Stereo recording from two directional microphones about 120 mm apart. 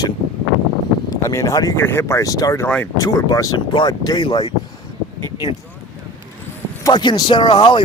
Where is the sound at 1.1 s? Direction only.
25° left (ahead or behind).